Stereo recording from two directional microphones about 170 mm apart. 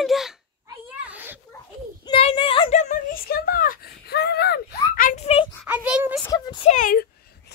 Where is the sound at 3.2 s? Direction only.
60° left (ahead or behind); by 5.4 s 40° left (ahead or behind).